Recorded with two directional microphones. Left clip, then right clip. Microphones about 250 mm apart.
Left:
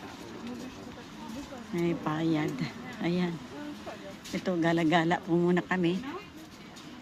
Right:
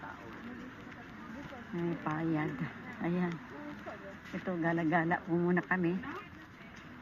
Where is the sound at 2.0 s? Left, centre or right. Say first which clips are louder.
Left 5 dB; centre.